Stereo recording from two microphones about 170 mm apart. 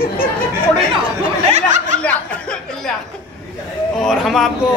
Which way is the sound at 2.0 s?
5° left (ahead or behind).